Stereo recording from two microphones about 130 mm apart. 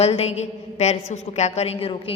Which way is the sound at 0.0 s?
50° left (ahead or behind).